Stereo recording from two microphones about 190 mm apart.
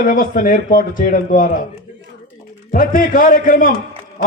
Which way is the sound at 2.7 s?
45° left (ahead or behind).